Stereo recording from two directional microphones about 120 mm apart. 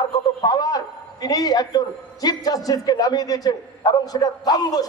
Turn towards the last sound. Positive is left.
turn(degrees=30)  # may be behind; listen again after turning